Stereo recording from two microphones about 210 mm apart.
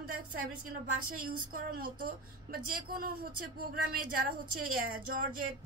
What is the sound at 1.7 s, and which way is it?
A woman's voice, 45° right (ahead or behind).